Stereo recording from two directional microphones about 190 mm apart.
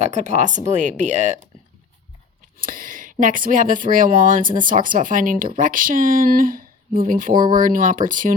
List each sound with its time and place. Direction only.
0.0 s speech: 40° right (ahead or behind)
2.6 s speech: 45° right (ahead or behind)